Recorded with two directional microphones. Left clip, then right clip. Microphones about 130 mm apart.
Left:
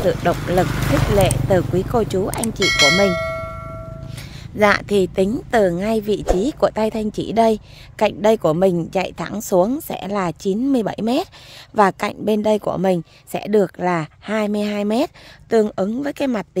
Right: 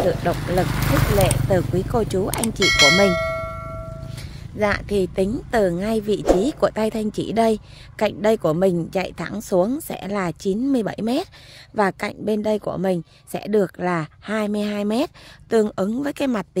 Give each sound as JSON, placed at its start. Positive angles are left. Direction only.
{"t": 0.0, "sound": "speech", "side_deg": 20}
{"t": 0.7, "sound": "speech", "side_deg": -85}
{"t": 1.1, "sound": "a woman's voice", "side_deg": 20}
{"t": 4.6, "sound": "a woman's voice", "side_deg": 25}